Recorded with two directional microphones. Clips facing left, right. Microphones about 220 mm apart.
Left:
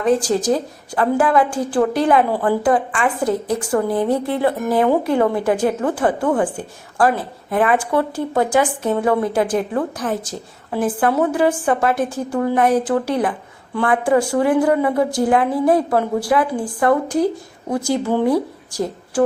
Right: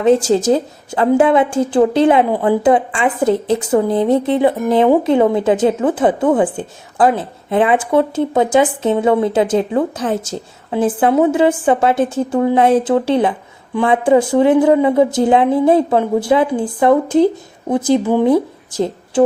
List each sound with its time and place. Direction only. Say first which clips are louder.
0.0 s a woman's voice: right 5 dB; 25° right (ahead or behind)